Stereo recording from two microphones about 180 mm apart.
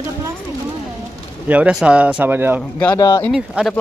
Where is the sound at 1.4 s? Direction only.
5° right (ahead or behind).